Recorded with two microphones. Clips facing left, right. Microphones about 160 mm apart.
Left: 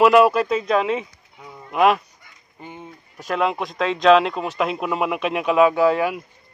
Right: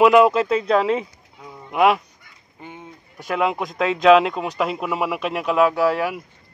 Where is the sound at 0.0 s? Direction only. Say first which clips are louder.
Even; 20° right (ahead or behind).